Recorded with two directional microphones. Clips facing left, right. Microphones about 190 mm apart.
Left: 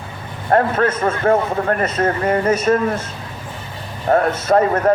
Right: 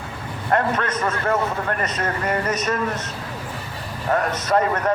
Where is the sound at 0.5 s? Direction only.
45° left (ahead or behind).